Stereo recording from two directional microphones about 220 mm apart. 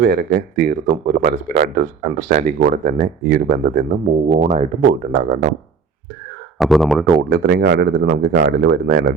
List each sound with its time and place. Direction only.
0.0 s speech: 45° right (ahead or behind)
6.6 s speech: centre (ahead or behind)
7.3 s speech: 50° right (ahead or behind)